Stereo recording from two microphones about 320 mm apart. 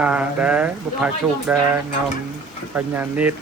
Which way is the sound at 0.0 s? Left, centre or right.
Centre.